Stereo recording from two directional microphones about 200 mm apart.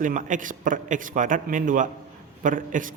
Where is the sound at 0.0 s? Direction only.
40° right (ahead or behind).